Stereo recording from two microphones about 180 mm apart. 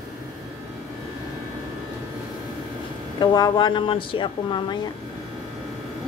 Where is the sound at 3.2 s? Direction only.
25° left (ahead or behind).